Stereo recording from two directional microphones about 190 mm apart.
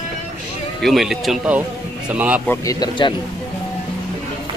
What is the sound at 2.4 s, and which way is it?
Speech, 15° left (ahead or behind).